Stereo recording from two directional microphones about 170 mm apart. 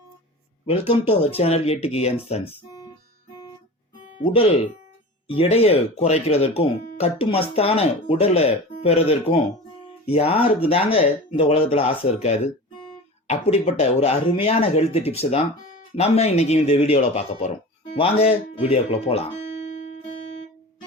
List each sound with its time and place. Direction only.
1.4 s speech: 35° left (ahead or behind)
4.2 s speech: 35° left (ahead or behind)